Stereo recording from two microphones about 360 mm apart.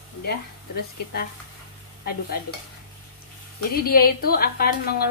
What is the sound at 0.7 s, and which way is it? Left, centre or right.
Speech, left.